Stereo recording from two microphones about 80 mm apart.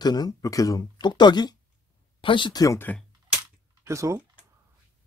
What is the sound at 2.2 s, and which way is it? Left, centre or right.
Speech, left.